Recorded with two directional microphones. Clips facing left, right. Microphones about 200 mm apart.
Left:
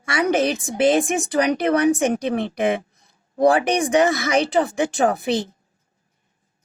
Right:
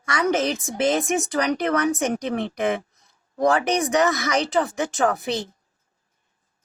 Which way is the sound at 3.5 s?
15° left (ahead or behind).